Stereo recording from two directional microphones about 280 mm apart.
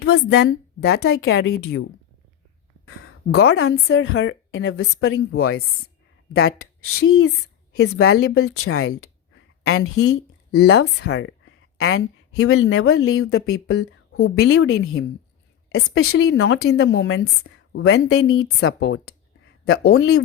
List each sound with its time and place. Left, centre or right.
0.0 s a woman's voice: left
3.4 s a woman's voice: left
7.8 s a woman's voice: left
8.4 s a woman's voice: left